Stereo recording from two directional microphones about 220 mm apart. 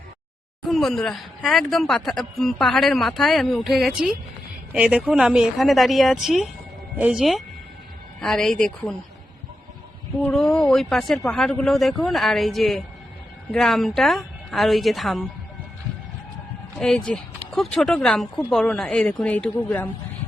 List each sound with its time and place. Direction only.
0.7 s speech: centre (ahead or behind)
10.2 s speech: 5° left (ahead or behind)
16.7 s speech: 5° left (ahead or behind)